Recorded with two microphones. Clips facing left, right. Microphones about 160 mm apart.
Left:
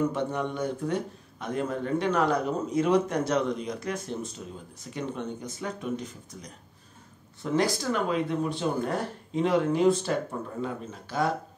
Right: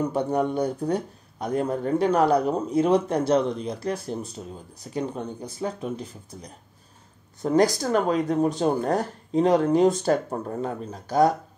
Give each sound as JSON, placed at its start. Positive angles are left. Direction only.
{"t": 0.0, "sound": "speech", "side_deg": -35}